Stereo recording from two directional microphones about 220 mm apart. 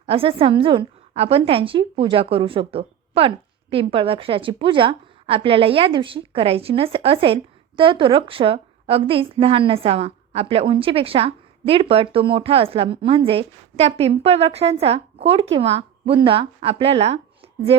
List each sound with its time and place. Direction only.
0.0 s a woman's voice: 25° right (ahead or behind)